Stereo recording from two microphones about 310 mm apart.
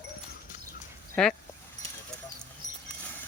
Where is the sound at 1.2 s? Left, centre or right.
Centre.